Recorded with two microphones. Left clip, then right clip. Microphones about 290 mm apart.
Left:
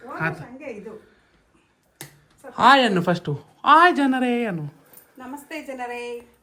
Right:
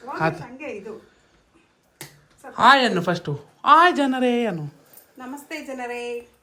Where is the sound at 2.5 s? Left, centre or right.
Centre.